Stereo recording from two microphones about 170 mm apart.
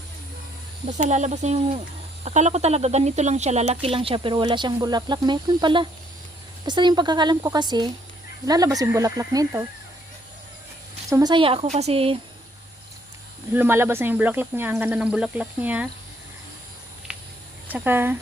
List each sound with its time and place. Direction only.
0.9 s speech: 45° right (ahead or behind); by 9.6 s 15° right (ahead or behind)
11.1 s speech: 25° right (ahead or behind)
13.5 s speech: 15° right (ahead or behind)
17.7 s speech: 10° right (ahead or behind)